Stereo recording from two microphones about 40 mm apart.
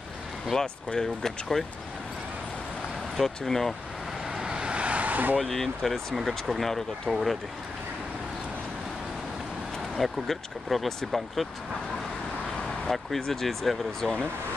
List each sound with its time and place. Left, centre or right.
0.5 s speech: centre
3.2 s speech: centre
4.4 s vehicle: right
5.4 s speech: centre
6.1 s speech: centre
9.9 s speech: centre
12.8 s speech: centre